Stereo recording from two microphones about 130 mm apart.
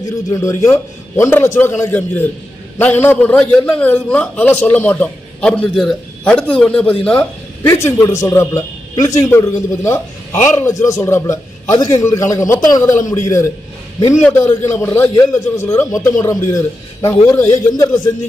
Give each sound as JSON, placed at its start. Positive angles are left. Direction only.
{"t": 0.0, "sound": "a man's voice", "side_deg": 25}
{"t": 7.7, "sound": "a man's voice", "side_deg": 20}